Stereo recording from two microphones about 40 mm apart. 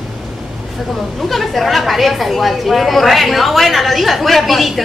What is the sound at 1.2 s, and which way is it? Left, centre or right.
A woman's voice, centre.